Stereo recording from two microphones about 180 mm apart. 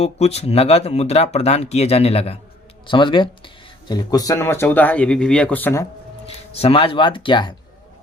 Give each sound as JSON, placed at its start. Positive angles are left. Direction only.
{"t": 0.0, "sound": "speech", "side_deg": 35}
{"t": 6.5, "sound": "speech", "side_deg": 35}